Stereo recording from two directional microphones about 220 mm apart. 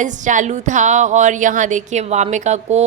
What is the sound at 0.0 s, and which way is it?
A woman's voice, 35° right (ahead or behind).